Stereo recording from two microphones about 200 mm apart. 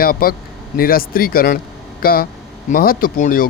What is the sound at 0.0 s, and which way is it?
Speech, 45° left (ahead or behind).